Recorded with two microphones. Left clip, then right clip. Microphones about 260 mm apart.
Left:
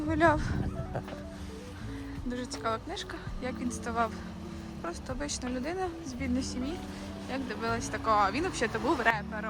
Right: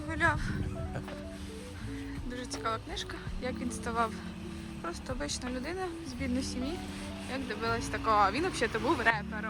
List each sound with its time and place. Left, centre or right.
0.1 s speech: centre
2.3 s speech: centre
7.3 s speech: centre